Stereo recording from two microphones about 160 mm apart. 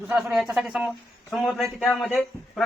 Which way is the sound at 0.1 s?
5° right (ahead or behind).